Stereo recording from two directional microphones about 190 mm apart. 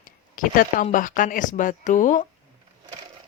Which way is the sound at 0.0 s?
45° left (ahead or behind).